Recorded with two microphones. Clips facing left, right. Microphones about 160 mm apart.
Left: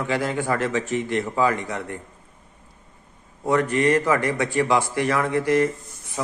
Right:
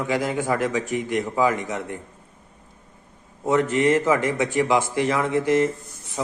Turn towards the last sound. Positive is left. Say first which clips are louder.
# right 1 dB
turn(degrees=-15)  # may be behind; listen again after turning